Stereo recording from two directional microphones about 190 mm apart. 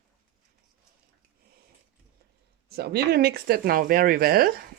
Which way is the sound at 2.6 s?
55° right (ahead or behind).